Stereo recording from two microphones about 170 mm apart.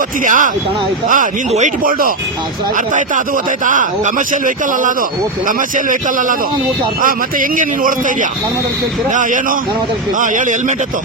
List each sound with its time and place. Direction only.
0.3 s a man's voice: 50° right (ahead or behind)
3.7 s a man's voice: 50° right (ahead or behind)